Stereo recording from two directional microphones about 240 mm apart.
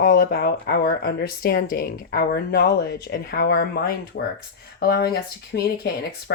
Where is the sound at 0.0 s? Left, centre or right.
Left.